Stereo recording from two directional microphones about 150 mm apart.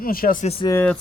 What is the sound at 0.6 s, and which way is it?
Speech, 20° left (ahead or behind).